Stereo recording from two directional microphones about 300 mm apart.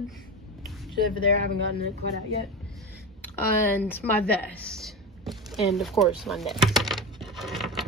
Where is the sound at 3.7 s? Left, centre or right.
Centre.